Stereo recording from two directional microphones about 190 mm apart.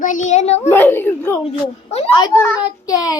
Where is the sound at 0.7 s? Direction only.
10° left (ahead or behind).